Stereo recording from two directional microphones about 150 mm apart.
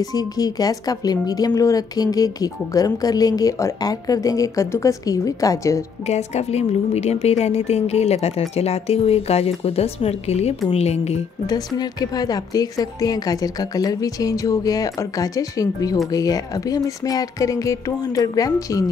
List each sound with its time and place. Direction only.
0.0 s speech: 25° left (ahead or behind)
6.0 s speech: 45° left (ahead or behind)
11.4 s speech: 25° left (ahead or behind)